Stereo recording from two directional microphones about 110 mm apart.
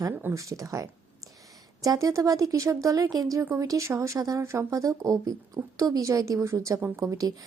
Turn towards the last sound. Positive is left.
turn(degrees=-30)  # may be behind; listen again after turning